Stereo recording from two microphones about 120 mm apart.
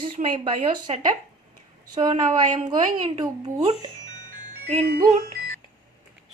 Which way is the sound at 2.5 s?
40° right (ahead or behind).